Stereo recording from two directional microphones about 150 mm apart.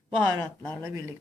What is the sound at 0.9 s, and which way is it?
Speech, 15° right (ahead or behind).